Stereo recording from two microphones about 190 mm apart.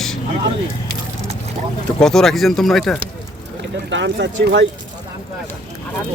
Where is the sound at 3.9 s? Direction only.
70° right (ahead or behind).